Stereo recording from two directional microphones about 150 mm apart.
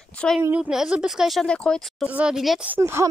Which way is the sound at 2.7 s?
15° right (ahead or behind).